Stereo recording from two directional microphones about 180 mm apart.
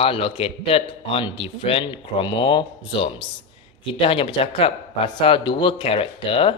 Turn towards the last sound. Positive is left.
turn(degrees=30)  # may be behind; listen again after turning